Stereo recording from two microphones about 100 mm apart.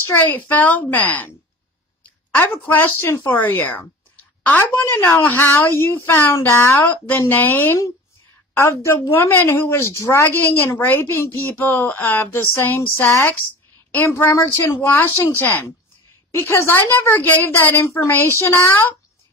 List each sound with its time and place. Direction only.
0.1 s speech: 20° left (ahead or behind)
2.3 s a woman's voice: 20° left (ahead or behind)